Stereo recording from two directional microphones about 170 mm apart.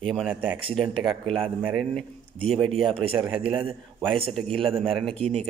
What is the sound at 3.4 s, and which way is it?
Speech, 30° right (ahead or behind).